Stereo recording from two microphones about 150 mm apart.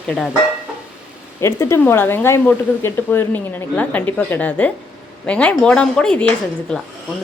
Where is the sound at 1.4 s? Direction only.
20° left (ahead or behind).